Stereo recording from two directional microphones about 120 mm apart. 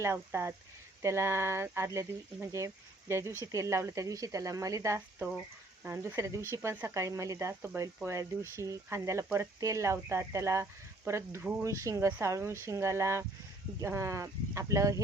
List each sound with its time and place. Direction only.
0.0 s speech: 20° right (ahead or behind)